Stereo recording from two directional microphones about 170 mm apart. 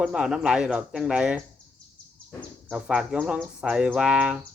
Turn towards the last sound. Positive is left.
turn(degrees=-5)  # may be behind; listen again after turning